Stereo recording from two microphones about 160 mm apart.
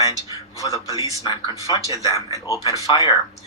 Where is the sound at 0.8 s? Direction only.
20° right (ahead or behind).